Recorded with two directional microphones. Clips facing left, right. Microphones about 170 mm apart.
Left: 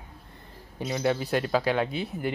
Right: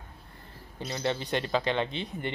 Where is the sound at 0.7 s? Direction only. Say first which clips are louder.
Left 5 dB; 10° left (ahead or behind).